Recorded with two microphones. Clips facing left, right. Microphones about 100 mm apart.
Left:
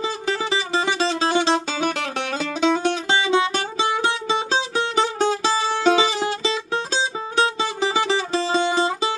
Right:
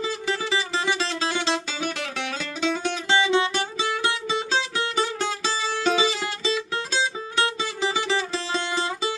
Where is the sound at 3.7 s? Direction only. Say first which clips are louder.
Left 4 dB; 25° left (ahead or behind).